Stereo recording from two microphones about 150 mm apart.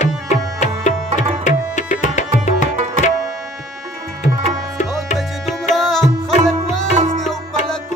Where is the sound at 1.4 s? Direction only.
55° left (ahead or behind).